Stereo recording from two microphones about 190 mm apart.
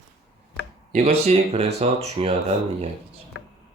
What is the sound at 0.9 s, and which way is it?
Speech, 35° right (ahead or behind).